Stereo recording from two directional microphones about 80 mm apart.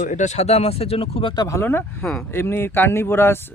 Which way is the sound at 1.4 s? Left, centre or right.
Left.